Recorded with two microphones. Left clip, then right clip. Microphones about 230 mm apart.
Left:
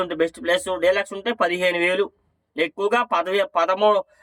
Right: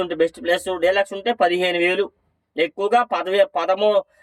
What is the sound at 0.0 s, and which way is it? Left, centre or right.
Speech, centre.